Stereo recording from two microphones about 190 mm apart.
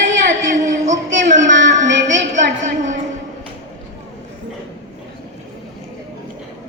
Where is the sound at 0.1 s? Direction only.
40° right (ahead or behind).